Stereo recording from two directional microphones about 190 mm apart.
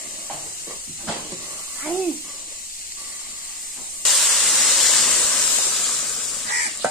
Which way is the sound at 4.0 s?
Centre (ahead or behind).